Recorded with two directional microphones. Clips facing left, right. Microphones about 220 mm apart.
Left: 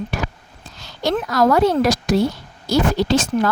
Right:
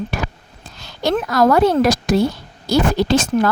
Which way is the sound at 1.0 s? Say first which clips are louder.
Right 2 dB; 50° right (ahead or behind).